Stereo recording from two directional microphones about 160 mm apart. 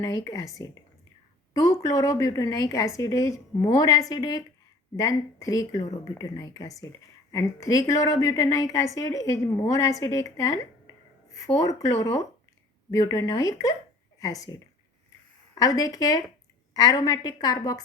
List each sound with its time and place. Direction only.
0.0 s a woman's voice: 20° left (ahead or behind)